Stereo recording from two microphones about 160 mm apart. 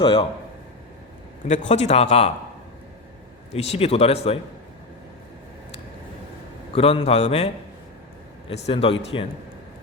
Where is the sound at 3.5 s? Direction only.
40° left (ahead or behind).